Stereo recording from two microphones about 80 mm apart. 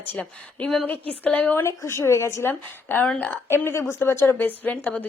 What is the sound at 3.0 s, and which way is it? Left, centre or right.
Speech, centre.